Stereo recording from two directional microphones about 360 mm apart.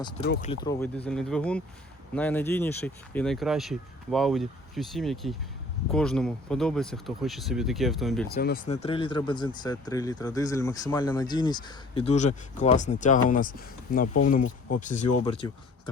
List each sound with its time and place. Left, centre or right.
0.3 s speech: centre
8.3 s speech: left